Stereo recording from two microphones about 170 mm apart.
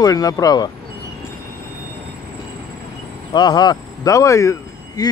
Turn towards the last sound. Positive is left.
turn(degrees=20)  # may be behind; listen again after turning